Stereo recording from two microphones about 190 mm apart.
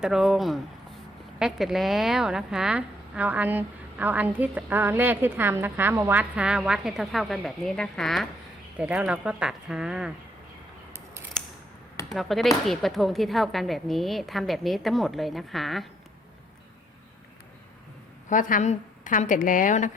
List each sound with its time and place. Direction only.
0.0 s a woman's voice: centre (ahead or behind)
12.1 s a woman's voice: centre (ahead or behind)
18.3 s a woman's voice: 45° left (ahead or behind)